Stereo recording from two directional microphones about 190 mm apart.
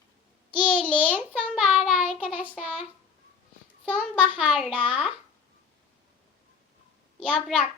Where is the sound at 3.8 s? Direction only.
5° left (ahead or behind).